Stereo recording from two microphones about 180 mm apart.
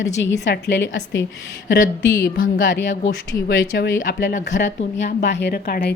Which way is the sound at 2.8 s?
80° left.